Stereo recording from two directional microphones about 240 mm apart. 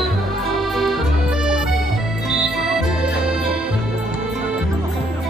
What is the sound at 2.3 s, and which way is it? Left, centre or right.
Music, centre.